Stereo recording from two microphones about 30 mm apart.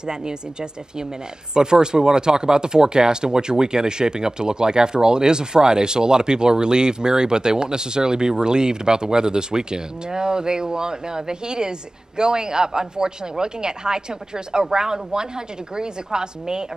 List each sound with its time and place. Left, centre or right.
0.0 s speech: right